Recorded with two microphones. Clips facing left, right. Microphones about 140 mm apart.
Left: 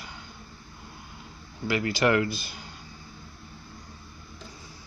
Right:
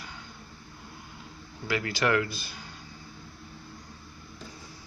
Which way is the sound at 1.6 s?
15° left (ahead or behind).